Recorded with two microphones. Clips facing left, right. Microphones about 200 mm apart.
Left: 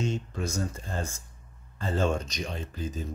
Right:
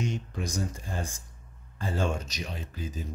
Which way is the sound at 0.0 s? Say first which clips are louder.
Left 2 dB; 15° right (ahead or behind).